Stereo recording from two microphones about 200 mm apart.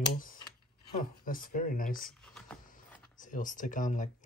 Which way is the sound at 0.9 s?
45° left (ahead or behind).